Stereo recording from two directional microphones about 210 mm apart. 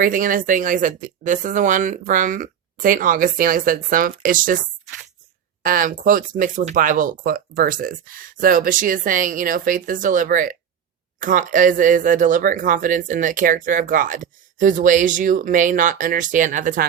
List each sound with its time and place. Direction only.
0.0 s speech: 40° right (ahead or behind)